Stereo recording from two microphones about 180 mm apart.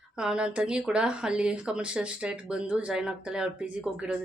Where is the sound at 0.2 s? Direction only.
5° right (ahead or behind).